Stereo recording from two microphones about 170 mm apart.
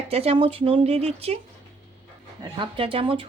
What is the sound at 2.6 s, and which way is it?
Speech, 30° right (ahead or behind).